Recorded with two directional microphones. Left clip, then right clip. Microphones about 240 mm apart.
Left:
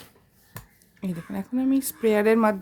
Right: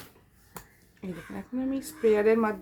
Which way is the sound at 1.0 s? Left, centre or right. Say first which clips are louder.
Left 5 dB; left.